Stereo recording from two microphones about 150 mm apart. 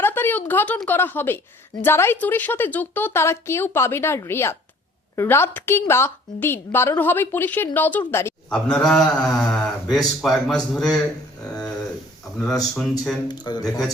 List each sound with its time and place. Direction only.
0.0 s a woman's voice: 15° left (ahead or behind)
13.2 s a man's voice: 30° left (ahead or behind)